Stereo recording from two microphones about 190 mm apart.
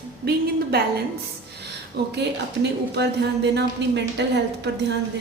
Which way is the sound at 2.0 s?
60° right (ahead or behind).